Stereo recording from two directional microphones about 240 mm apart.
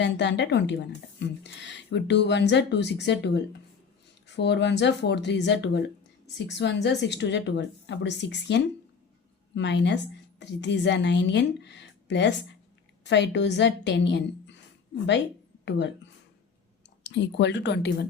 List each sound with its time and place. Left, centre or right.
0.0 s a woman's voice: left
17.0 s a woman's voice: left